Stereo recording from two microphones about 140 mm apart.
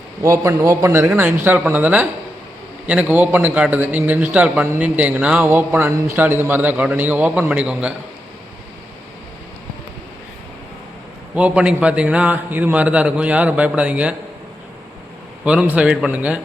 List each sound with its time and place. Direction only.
0.2 s a man's voice: 25° right (ahead or behind); by 7.9 s 5° right (ahead or behind)
11.3 s a man's voice: 10° right (ahead or behind)
15.4 s a man's voice: 10° right (ahead or behind)